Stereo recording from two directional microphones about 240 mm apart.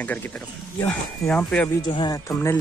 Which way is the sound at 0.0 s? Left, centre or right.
Centre.